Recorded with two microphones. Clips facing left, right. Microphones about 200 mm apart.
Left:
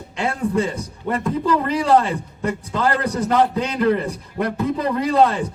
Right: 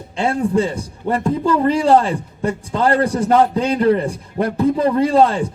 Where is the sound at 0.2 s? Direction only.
30° right (ahead or behind).